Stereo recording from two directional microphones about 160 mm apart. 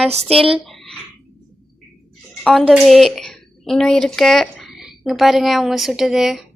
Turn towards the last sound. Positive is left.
turn(degrees=0)  # may be behind; listen again after turning